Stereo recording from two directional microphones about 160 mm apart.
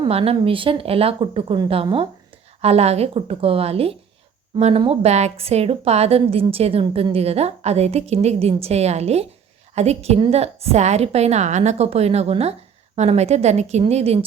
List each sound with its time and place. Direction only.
0.0 s a woman's voice: 40° right (ahead or behind)